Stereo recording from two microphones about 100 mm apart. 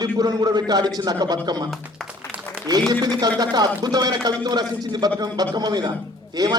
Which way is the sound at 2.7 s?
40° right (ahead or behind).